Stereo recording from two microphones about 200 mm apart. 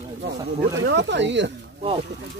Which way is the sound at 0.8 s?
60° right (ahead or behind).